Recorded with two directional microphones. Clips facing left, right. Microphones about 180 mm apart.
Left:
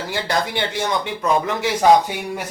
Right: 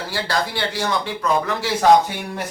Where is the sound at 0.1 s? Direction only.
20° left (ahead or behind).